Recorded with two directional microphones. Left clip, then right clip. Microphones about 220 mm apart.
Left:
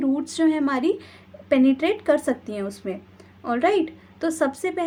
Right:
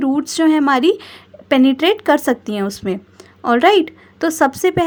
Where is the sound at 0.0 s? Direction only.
40° right (ahead or behind).